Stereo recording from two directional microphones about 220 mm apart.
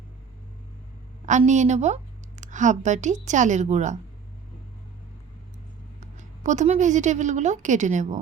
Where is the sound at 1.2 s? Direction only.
35° right (ahead or behind).